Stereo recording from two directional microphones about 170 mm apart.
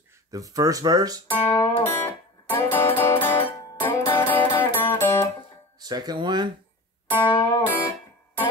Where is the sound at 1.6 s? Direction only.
15° left (ahead or behind).